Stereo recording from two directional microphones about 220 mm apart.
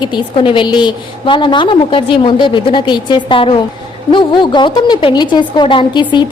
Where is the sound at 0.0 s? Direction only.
20° left (ahead or behind).